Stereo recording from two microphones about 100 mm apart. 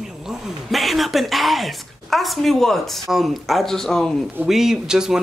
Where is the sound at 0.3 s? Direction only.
Centre (ahead or behind).